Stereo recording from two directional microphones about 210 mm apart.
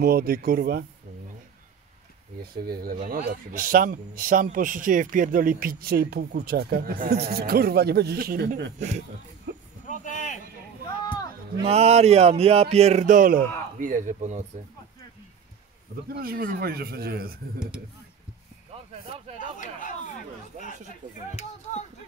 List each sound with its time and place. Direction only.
0.0 s a man's voice: 45° right (ahead or behind)
2.4 s a man's voice: 45° right (ahead or behind)
8.7 s speech: 35° right (ahead or behind)
9.5 s a sound: 55° right (ahead or behind)
9.8 s a sound: 35° left (ahead or behind)
11.6 s speech: 30° right (ahead or behind)
16.1 s a man's voice: 45° right (ahead or behind)
17.6 s speech: 5° right (ahead or behind)
19.3 s speech: 35° left (ahead or behind)
20.5 s speech: 35° right (ahead or behind)